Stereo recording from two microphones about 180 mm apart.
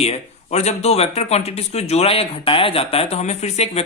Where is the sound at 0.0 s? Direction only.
35° left (ahead or behind).